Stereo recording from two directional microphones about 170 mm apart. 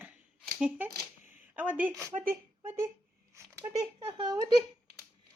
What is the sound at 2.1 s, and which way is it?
Speech, 45° right (ahead or behind).